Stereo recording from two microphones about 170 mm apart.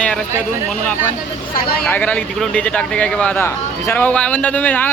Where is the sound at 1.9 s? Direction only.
10° left (ahead or behind).